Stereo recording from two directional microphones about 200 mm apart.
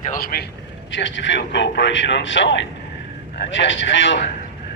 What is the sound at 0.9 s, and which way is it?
A man's voice, 65° left (ahead or behind).